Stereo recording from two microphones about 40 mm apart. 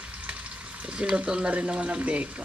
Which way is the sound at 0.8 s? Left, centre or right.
Right.